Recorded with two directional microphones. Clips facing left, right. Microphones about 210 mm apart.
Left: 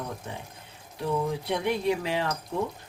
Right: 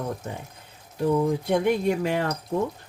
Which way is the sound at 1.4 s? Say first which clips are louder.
Right 4 dB; 45° right (ahead or behind).